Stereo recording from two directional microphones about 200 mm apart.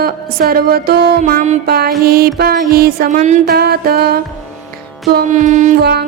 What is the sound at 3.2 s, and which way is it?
Music, 35° right (ahead or behind).